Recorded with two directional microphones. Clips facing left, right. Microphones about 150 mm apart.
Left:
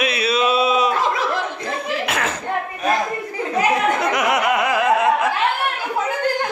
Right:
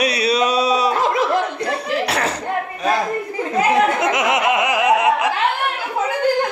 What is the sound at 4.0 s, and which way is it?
Laughter, 20° right (ahead or behind).